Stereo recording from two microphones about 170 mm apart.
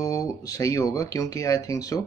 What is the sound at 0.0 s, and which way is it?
Speech, 20° left (ahead or behind).